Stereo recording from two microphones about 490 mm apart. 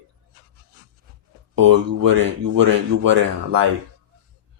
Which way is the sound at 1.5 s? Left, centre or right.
Right.